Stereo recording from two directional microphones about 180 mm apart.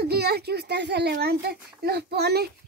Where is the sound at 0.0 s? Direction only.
65° right (ahead or behind).